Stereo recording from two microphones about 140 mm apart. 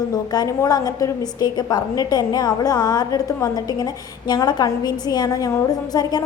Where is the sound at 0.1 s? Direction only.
25° left (ahead or behind).